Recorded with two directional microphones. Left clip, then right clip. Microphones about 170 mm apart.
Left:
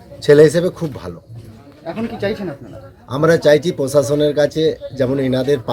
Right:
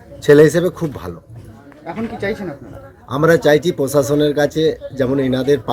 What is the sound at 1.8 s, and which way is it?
Speech, 75° left (ahead or behind).